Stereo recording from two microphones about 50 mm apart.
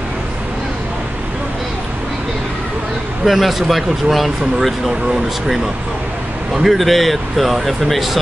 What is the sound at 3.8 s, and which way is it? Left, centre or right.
Speech, centre.